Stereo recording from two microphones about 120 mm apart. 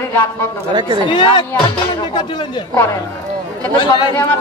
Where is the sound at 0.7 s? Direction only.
40° right (ahead or behind).